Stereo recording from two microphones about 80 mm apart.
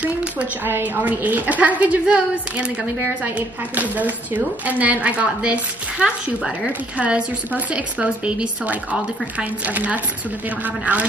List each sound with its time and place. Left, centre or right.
0.0 s a woman's voice: centre